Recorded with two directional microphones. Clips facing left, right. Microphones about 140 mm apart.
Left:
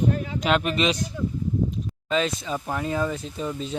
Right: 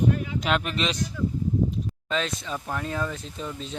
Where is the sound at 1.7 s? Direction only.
5° left (ahead or behind).